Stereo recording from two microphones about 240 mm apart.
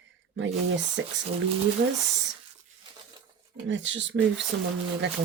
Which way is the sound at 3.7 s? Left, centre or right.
Right.